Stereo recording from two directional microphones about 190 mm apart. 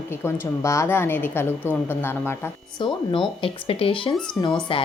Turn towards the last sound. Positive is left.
turn(degrees=25)  # may be behind; listen again after turning